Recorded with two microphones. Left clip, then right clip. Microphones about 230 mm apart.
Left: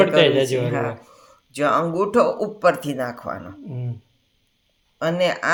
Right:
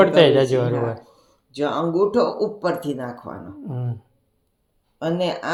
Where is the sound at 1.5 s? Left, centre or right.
Left.